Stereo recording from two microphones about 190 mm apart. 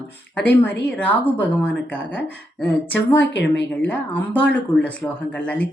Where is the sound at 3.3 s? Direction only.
70° left (ahead or behind).